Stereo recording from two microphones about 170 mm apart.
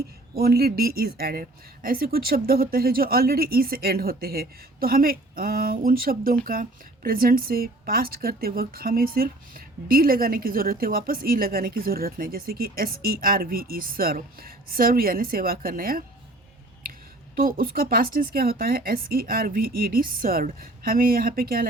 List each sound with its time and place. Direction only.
0.3 s speech: 65° right (ahead or behind)
17.3 s speech: 55° right (ahead or behind)